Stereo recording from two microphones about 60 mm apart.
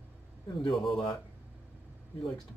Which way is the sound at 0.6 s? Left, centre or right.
Centre.